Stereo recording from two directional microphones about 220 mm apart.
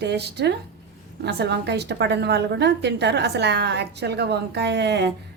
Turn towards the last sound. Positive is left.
turn(degrees=-50)  # may be behind; listen again after turning